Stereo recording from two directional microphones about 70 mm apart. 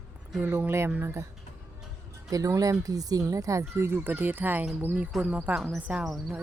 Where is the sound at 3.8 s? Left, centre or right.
Right.